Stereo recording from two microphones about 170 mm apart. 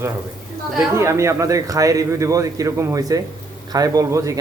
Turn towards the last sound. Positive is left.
turn(degrees=-20)  # may be behind; listen again after turning